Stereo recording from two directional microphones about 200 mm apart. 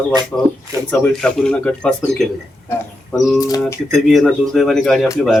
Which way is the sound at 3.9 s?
Centre (ahead or behind).